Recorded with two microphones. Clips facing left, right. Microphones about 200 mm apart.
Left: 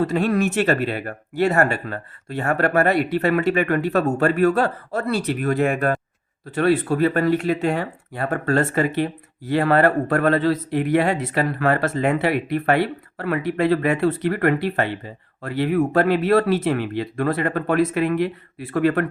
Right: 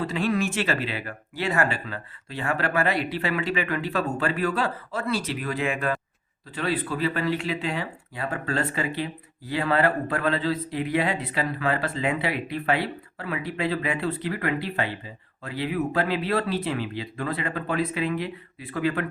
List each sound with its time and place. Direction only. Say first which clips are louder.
0.0 s speech: left 6 dB; 45° left (ahead or behind)
17.8 s speech: left 7 dB; 65° left (ahead or behind)